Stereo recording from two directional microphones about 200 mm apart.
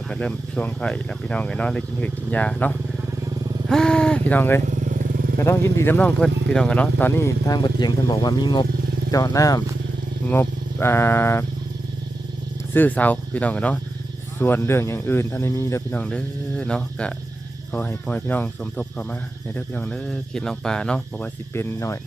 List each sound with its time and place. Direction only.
0.1 s speech: 5° left (ahead or behind)
3.7 s a sound: 5° left (ahead or behind)
4.6 s motorcycle: 40° right (ahead or behind)
5.4 s speech: 15° left (ahead or behind)
12.7 s speech: 10° left (ahead or behind)